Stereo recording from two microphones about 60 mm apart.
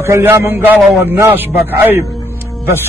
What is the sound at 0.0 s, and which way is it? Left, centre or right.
Speech, right.